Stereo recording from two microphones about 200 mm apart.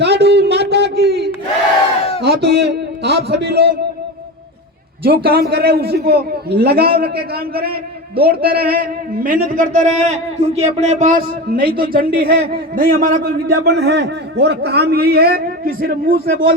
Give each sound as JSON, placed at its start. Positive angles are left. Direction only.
{"t": 0.0, "sound": "a sound", "side_deg": -55}
{"t": 2.2, "sound": "a man's voice", "side_deg": -55}
{"t": 5.0, "sound": "a man's voice", "side_deg": -50}